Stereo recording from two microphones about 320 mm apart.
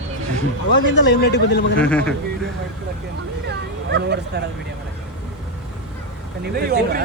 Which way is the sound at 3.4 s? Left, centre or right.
Right.